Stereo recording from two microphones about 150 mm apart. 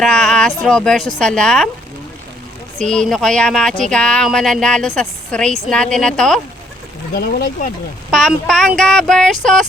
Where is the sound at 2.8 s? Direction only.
5° left (ahead or behind).